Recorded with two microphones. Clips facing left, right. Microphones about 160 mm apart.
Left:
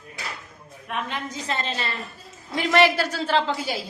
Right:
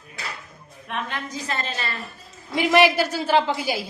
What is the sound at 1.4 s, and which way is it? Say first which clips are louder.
Speech: left 2 dB; 25° left (ahead or behind).